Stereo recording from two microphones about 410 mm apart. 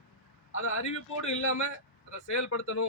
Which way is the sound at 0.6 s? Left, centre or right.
Left.